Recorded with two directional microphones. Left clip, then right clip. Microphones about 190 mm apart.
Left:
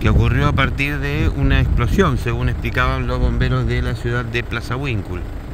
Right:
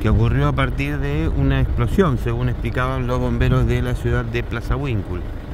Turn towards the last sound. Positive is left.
turn(degrees=-10)  # may be behind; listen again after turning